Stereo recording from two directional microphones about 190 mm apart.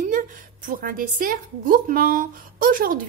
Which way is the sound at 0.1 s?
45° right (ahead or behind).